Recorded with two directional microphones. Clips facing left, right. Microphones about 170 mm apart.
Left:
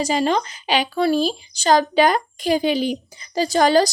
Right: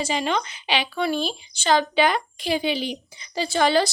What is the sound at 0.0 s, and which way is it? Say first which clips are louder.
A woman's voice: left 5 dB; 40° left (ahead or behind).